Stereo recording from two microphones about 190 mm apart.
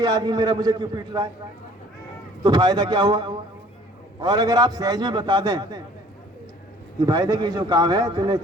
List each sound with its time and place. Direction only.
0.0 s a man's voice: 20° right (ahead or behind)
2.4 s a man's voice: 20° right (ahead or behind)
7.0 s a man's voice: 20° right (ahead or behind)